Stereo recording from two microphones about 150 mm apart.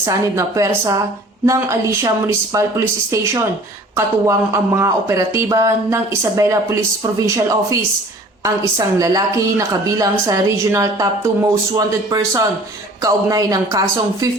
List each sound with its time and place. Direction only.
0.1 s a woman's voice: 20° right (ahead or behind)